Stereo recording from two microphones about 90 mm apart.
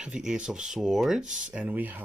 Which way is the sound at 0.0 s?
10° right (ahead or behind).